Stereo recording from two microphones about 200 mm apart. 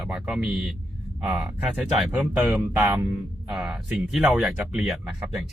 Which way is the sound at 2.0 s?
Centre (ahead or behind).